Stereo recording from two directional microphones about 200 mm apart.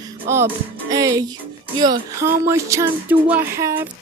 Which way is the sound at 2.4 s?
15° right (ahead or behind).